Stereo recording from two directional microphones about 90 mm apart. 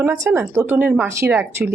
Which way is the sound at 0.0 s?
30° right (ahead or behind).